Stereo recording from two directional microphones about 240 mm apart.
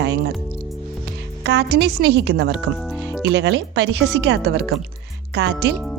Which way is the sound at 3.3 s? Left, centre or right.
Right.